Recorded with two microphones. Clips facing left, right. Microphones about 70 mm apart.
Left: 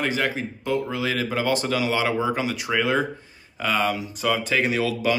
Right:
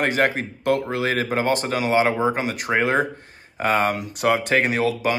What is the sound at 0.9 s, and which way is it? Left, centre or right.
Speech, right.